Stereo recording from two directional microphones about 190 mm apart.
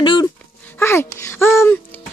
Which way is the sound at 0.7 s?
10° left (ahead or behind).